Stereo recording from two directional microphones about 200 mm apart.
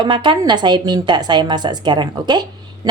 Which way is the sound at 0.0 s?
25° right (ahead or behind).